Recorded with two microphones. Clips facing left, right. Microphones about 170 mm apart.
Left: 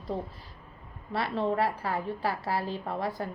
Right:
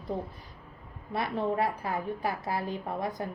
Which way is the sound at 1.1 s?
15° right (ahead or behind).